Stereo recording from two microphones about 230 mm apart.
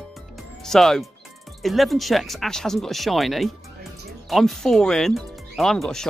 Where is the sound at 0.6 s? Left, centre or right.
Centre.